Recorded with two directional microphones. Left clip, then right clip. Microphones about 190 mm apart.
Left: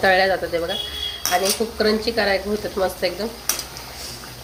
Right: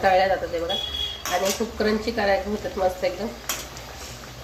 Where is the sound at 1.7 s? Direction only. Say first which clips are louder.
Left 4 dB; 20° left (ahead or behind).